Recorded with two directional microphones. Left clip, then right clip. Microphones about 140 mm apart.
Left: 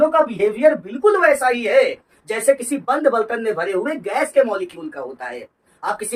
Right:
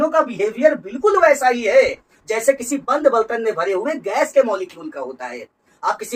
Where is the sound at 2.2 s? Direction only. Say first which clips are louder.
Even; 20° left (ahead or behind).